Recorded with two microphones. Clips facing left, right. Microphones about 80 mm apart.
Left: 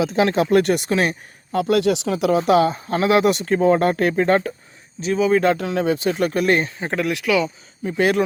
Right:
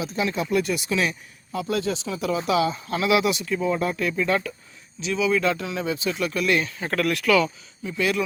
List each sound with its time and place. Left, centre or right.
0.0 s speech: left
1.5 s speech: left
3.3 s speech: left
6.7 s speech: left
7.0 s speech: centre
7.9 s speech: left